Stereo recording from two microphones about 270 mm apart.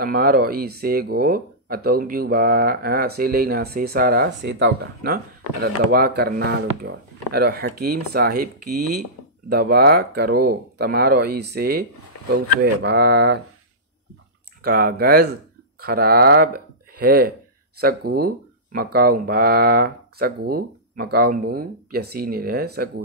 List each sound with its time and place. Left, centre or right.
0.0 s speech: right
12.8 s speech: right
14.6 s speech: right